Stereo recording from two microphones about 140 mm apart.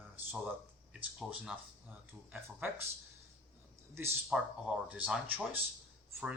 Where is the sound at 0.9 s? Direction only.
10° right (ahead or behind).